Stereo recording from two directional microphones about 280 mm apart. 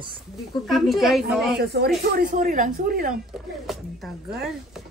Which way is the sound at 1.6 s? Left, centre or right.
Right.